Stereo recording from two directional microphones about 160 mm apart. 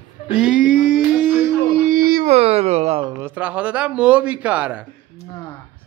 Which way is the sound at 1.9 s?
60° right (ahead or behind).